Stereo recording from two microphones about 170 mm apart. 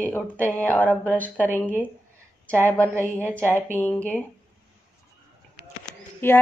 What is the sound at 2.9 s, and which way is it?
Speech, 15° right (ahead or behind).